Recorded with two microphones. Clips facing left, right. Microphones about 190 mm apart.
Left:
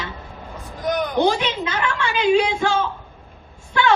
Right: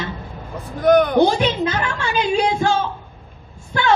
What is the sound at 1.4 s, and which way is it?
A woman's voice, 40° right (ahead or behind).